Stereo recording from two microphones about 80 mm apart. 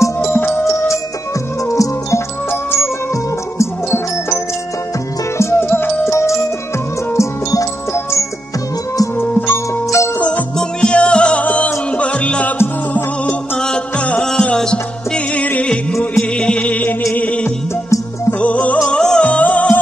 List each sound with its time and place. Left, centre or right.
0.0 s music: left
1.7 s music: left
5.4 s music: left
9.8 s music: left
10.1 s music: centre
13.6 s music: centre